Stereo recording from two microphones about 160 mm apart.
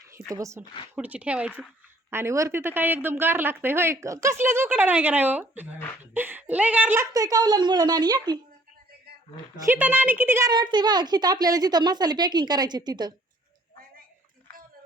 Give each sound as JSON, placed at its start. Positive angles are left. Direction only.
{"t": 0.3, "sound": "a woman's voice", "side_deg": -20}
{"t": 0.9, "sound": "a woman's voice", "side_deg": -10}
{"t": 9.6, "sound": "a woman's voice", "side_deg": -10}
{"t": 10.5, "sound": "a woman's voice", "side_deg": -25}